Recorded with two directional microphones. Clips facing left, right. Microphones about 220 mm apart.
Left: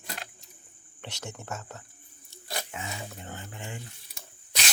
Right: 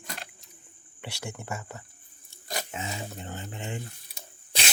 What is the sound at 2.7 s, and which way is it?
Speech, 25° right (ahead or behind).